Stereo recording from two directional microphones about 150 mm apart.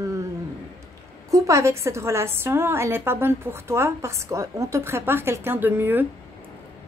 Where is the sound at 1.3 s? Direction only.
20° right (ahead or behind).